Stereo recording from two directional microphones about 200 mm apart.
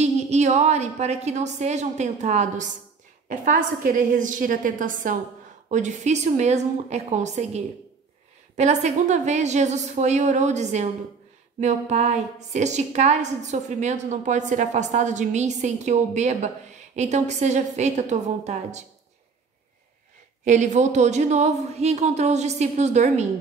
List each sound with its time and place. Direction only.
0.0 s a woman's voice: 35° right (ahead or behind)
20.4 s a woman's voice: 35° right (ahead or behind)